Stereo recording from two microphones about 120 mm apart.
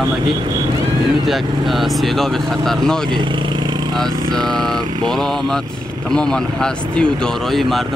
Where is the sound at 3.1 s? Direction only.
40° right (ahead or behind).